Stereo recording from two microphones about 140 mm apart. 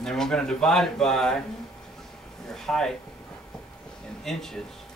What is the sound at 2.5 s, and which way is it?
Speech, 5° left (ahead or behind).